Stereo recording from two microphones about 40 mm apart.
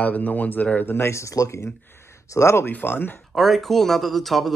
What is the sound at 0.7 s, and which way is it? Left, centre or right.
Speech, left.